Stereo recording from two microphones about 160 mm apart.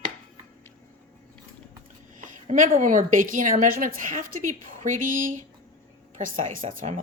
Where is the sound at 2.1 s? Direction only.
55° right (ahead or behind).